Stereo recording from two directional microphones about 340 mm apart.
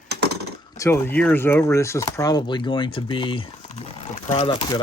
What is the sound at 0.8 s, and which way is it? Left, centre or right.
Speech, centre.